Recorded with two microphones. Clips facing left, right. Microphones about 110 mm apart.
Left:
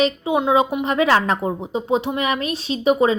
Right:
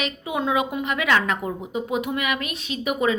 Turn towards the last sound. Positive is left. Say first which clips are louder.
# left 6 dB
turn(degrees=30)  # may be behind; listen again after turning